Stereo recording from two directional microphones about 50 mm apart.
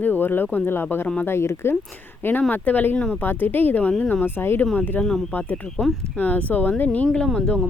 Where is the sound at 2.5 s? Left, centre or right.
Left.